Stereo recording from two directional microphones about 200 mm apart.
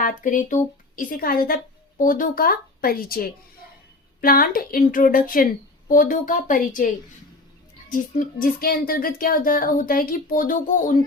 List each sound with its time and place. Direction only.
0.0 s speech: 40° left (ahead or behind)